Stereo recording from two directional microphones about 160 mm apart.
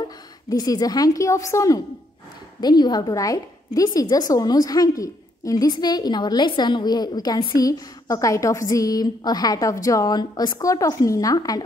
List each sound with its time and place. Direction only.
0.5 s a woman's voice: 25° left (ahead or behind)